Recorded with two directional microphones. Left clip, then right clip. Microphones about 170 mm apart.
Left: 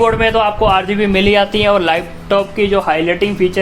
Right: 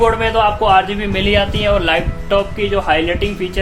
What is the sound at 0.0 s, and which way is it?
A man's voice, 30° left (ahead or behind).